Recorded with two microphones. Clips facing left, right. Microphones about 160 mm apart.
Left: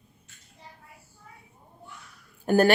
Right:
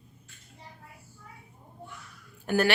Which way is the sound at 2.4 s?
45° left (ahead or behind).